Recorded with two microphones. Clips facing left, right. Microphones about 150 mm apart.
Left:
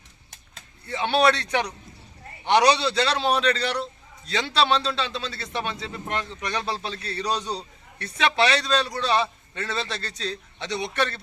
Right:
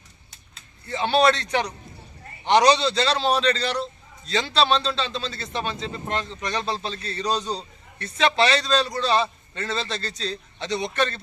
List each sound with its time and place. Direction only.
0.9 s a man's voice: 10° left (ahead or behind)